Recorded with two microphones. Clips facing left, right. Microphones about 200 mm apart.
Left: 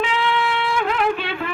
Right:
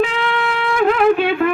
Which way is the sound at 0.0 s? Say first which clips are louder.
Right 3 dB; 50° right (ahead or behind).